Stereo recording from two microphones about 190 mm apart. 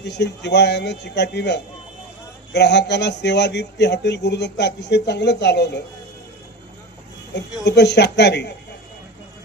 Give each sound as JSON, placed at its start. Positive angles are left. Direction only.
{"t": 0.0, "sound": "speech", "side_deg": 65}
{"t": 7.6, "sound": "speech", "side_deg": 65}